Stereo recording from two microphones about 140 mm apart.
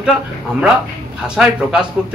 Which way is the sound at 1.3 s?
5° right (ahead or behind).